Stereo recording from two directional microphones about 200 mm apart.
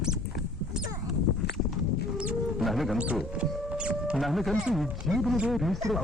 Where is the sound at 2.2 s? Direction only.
5° right (ahead or behind).